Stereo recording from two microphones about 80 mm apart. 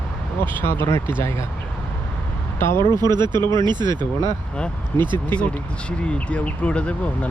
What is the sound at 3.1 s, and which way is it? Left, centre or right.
Speech, right.